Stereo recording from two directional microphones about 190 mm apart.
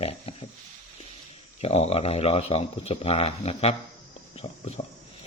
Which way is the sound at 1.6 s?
30° left (ahead or behind).